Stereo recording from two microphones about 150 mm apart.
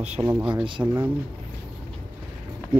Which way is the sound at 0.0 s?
45° right (ahead or behind).